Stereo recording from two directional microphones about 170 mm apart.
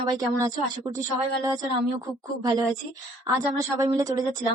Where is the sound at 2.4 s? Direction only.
25° right (ahead or behind).